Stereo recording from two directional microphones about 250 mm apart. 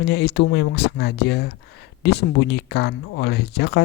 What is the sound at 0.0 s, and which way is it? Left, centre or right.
Speech, left.